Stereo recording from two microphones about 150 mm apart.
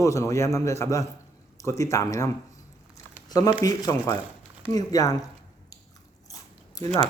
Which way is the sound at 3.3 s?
25° left (ahead or behind).